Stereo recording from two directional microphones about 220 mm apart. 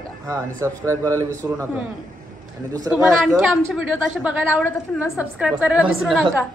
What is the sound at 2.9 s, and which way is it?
A woman's voice, centre (ahead or behind).